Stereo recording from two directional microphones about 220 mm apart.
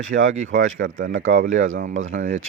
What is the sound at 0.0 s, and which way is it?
Speech, 65° right (ahead or behind).